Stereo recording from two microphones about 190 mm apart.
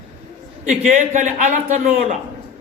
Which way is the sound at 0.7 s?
40° right (ahead or behind).